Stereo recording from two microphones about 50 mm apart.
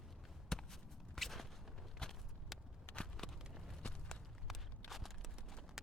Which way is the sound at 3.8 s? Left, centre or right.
Centre.